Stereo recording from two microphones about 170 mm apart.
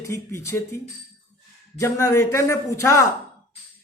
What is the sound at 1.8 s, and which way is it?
Speech, 15° left (ahead or behind).